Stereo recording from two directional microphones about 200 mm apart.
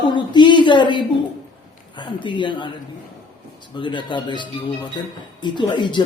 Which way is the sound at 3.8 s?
25° left (ahead or behind).